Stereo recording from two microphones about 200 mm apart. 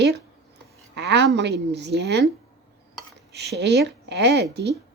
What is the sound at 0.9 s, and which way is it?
A woman's voice, 60° right (ahead or behind).